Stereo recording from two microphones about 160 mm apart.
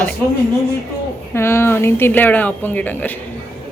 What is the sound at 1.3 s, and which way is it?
A woman's voice, 15° left (ahead or behind).